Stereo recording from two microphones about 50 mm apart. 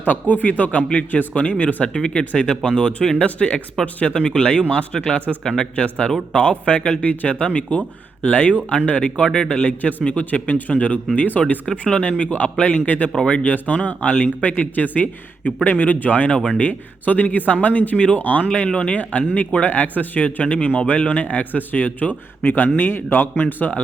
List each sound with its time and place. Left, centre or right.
0.1 s speech: left
1.9 s speech: centre
3.2 s speech: left
11.8 s speech: left
22.8 s a man's voice: left